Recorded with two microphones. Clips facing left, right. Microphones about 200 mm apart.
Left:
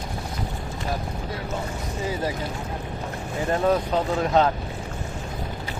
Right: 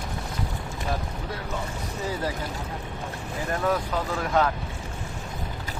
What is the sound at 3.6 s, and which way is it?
Speech, 25° left (ahead or behind).